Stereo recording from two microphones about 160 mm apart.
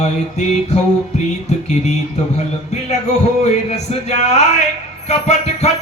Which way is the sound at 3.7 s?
45° left (ahead or behind).